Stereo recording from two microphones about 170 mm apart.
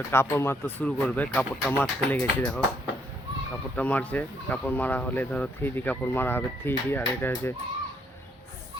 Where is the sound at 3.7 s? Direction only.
10° left (ahead or behind).